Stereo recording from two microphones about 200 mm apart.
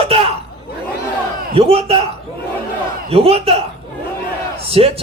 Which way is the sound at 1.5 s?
30° right (ahead or behind).